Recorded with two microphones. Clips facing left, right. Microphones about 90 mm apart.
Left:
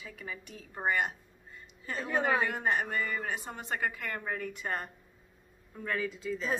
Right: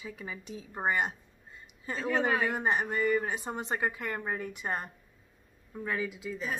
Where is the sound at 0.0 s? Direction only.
20° right (ahead or behind).